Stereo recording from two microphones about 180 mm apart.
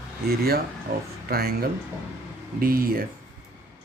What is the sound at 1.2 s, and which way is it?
Speech, 55° right (ahead or behind).